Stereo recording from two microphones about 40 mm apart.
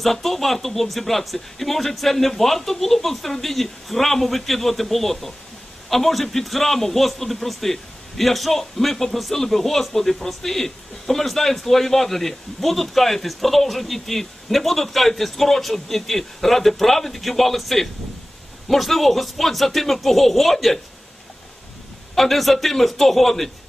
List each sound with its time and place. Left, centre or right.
0.0 s a man's voice: centre
22.1 s a man's voice: centre